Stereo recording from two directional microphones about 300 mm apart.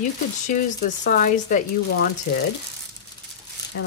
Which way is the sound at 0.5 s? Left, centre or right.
Left.